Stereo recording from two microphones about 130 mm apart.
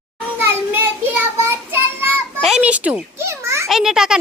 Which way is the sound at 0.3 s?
15° right (ahead or behind).